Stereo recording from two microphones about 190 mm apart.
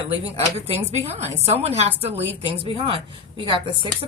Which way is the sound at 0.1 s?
30° right (ahead or behind).